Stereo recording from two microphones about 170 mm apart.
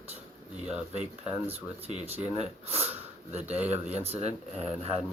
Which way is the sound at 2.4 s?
35° right (ahead or behind).